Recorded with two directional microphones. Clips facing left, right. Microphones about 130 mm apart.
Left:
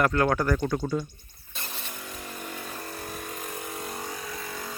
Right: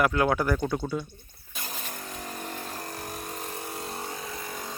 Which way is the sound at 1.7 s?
40° right (ahead or behind).